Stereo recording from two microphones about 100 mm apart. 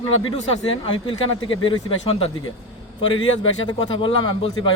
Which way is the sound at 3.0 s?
50° left (ahead or behind).